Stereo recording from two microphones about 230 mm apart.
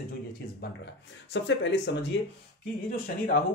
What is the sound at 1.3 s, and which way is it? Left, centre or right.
Speech, left.